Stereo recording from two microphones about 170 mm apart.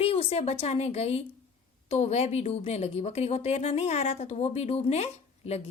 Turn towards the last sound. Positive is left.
turn(degrees=40)  # may be behind; listen again after turning